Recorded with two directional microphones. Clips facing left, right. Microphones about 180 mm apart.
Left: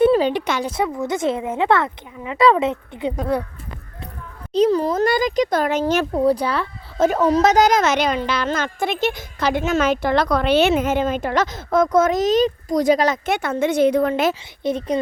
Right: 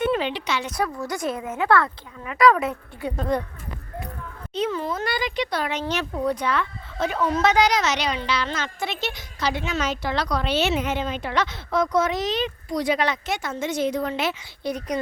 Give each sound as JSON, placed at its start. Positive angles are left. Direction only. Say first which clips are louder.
{"t": 0.0, "sound": "speech", "louder": "left 8 dB", "side_deg": 35}
{"t": 0.6, "sound": "a woman's voice", "louder": "left 5 dB", "side_deg": 25}
{"t": 3.2, "sound": "speech", "louder": "left 2 dB", "side_deg": 10}
{"t": 4.5, "sound": "speech", "louder": "left 9 dB", "side_deg": 40}
{"t": 6.2, "sound": "speech", "louder": "left 5 dB", "side_deg": 35}
{"t": 13.3, "sound": "a woman's voice", "louder": "left 7 dB", "side_deg": 60}
{"t": 14.6, "sound": "a woman's voice", "louder": "left 6 dB", "side_deg": 25}